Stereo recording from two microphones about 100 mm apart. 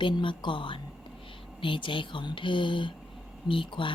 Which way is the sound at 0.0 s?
55° left (ahead or behind).